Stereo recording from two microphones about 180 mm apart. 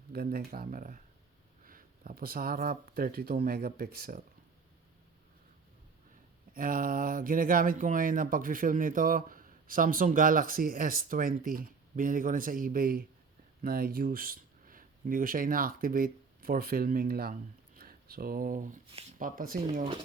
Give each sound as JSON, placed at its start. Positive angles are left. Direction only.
{"t": 0.1, "sound": "speech", "side_deg": -60}
{"t": 6.5, "sound": "speech", "side_deg": -50}